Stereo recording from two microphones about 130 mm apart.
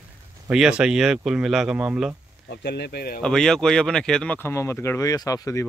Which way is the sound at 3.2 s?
5° left (ahead or behind).